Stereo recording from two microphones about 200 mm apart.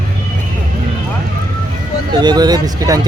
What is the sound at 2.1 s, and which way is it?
Speech, 20° right (ahead or behind).